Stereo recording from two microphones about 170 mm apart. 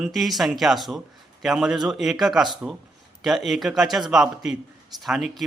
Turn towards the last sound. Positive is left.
turn(degrees=0)  # may be behind; listen again after turning